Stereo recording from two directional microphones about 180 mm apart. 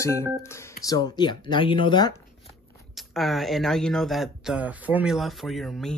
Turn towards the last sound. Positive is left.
turn(degrees=0)  # may be behind; listen again after turning